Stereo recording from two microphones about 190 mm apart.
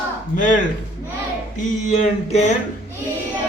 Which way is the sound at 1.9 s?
35° left (ahead or behind).